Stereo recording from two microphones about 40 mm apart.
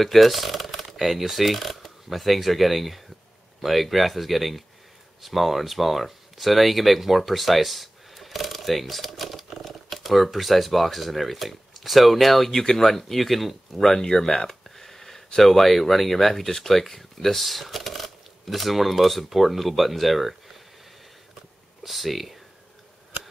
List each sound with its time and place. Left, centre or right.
0.0 s speech: centre
21.8 s speech: centre